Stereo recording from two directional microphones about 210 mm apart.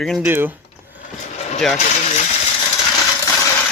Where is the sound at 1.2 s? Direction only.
30° left (ahead or behind).